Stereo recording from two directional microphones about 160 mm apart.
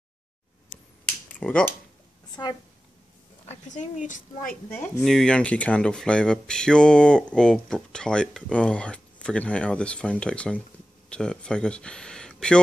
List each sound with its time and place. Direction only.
0.7 s finger snapping: 10° left (ahead or behind)
2.4 s a woman's voice: 25° left (ahead or behind)
3.4 s a woman's voice: 50° left (ahead or behind)
4.7 s speech: 10° left (ahead or behind)